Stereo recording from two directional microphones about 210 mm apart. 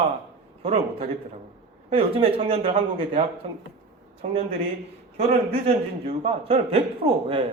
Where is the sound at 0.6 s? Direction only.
30° right (ahead or behind).